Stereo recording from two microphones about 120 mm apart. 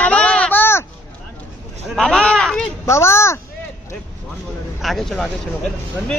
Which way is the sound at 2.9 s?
25° left (ahead or behind).